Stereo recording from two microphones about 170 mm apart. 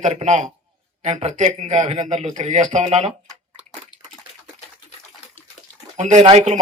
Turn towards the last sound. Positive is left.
turn(degrees=-40)  # may be behind; listen again after turning